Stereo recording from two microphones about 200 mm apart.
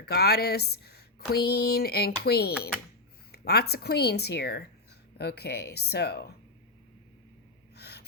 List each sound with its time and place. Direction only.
0.0 s speech: 50° left (ahead or behind)
7.8 s gasp: 55° left (ahead or behind)